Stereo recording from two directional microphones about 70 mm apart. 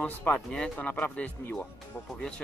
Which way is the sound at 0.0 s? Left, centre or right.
Left.